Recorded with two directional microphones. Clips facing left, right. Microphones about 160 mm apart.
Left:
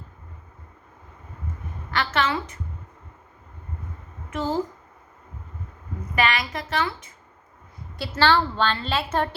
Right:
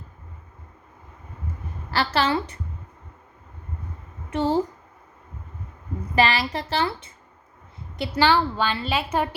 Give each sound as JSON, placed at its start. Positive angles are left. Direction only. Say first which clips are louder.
{"t": 2.1, "sound": "speech", "louder": "right 2 dB", "side_deg": -30}
{"t": 4.3, "sound": "speech", "louder": "right 4 dB", "side_deg": -30}
{"t": 6.1, "sound": "speech", "louder": "right 3 dB", "side_deg": -30}
{"t": 7.9, "sound": "a woman's voice", "louder": "right 1 dB", "side_deg": -15}